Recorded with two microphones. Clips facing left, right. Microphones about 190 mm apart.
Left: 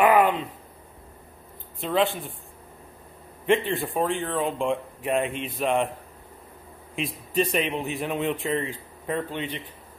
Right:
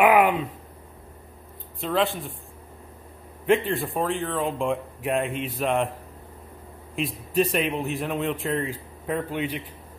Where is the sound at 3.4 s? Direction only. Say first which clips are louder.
Right 1 dB; centre (ahead or behind).